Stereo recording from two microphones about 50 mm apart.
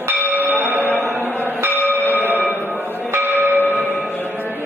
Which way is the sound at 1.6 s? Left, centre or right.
Right.